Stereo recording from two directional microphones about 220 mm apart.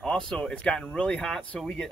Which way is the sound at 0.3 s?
5° left (ahead or behind).